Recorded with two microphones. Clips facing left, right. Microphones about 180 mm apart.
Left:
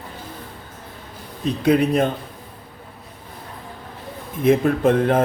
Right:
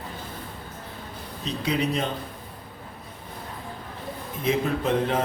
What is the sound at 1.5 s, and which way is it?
Speech, 55° left (ahead or behind).